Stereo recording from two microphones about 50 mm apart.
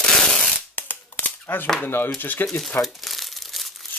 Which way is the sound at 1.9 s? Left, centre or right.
Left.